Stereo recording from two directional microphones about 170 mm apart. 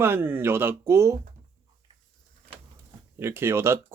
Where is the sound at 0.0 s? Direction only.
15° right (ahead or behind).